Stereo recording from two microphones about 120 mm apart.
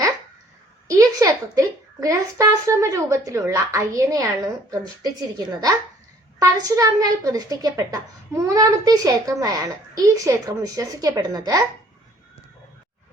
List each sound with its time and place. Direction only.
0.9 s a woman's voice: 25° right (ahead or behind)